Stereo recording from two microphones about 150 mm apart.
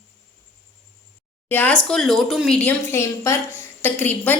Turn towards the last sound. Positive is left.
turn(degrees=15)  # may be behind; listen again after turning